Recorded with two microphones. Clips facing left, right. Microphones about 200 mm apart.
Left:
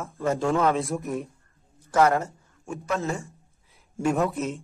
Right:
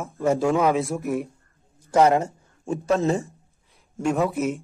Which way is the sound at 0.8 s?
Centre (ahead or behind).